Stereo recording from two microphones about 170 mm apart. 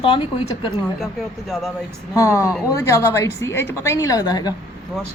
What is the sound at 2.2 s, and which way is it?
A woman's voice, 20° left (ahead or behind).